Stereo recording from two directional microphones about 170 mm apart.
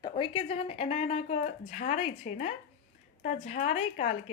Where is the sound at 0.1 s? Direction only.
35° left (ahead or behind).